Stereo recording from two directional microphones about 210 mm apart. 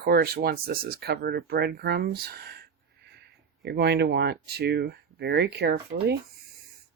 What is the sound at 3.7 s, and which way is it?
Speech, 50° right (ahead or behind).